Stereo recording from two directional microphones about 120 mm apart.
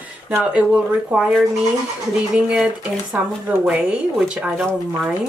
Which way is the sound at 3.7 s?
5° right (ahead or behind).